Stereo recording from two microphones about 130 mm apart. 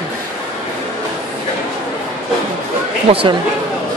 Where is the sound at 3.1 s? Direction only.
50° right (ahead or behind).